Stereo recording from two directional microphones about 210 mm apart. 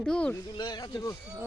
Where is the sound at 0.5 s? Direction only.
20° left (ahead or behind).